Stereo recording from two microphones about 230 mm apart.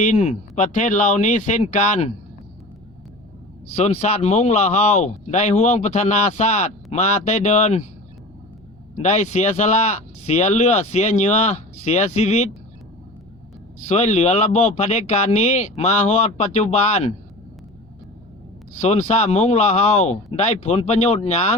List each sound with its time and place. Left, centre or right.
0.0 s speech: left
3.8 s speech: left
9.0 s speech: left
13.8 s speech: left
18.8 s speech: left